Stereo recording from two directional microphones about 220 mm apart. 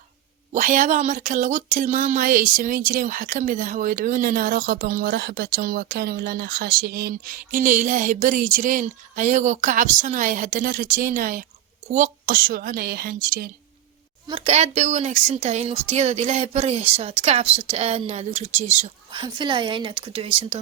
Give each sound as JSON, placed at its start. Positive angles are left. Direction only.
{"t": 0.5, "sound": "speech", "side_deg": -35}
{"t": 14.3, "sound": "a woman's voice", "side_deg": -25}
{"t": 19.2, "sound": "a woman's voice", "side_deg": -20}